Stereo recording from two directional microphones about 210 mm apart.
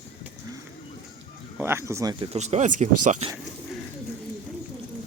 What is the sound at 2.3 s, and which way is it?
Speech, 30° right (ahead or behind).